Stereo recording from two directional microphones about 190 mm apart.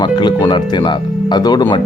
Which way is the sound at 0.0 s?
25° left (ahead or behind).